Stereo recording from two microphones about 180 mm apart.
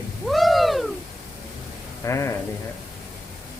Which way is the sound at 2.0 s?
15° left (ahead or behind).